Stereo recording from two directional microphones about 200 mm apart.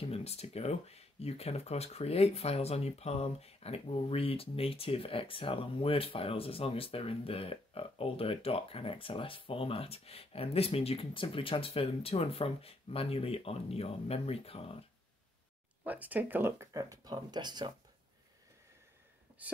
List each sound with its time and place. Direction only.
0.0 s speech: 30° left (ahead or behind)
15.8 s speech: 10° right (ahead or behind)